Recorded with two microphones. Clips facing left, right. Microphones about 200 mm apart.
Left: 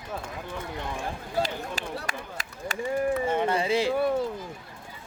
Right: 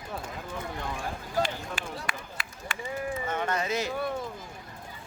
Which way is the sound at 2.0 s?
40° left (ahead or behind).